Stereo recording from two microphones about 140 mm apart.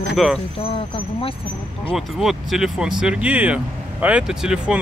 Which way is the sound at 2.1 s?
5° right (ahead or behind).